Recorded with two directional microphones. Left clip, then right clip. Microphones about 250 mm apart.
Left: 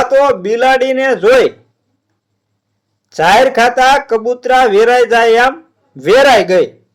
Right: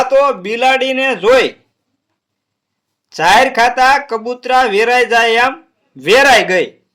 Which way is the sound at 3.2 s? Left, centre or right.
Centre.